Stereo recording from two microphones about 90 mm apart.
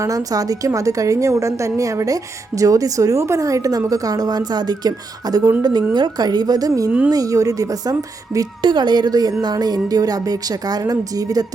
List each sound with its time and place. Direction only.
0.0 s a woman's voice: 40° right (ahead or behind)
8.6 s a woman's voice: 55° right (ahead or behind)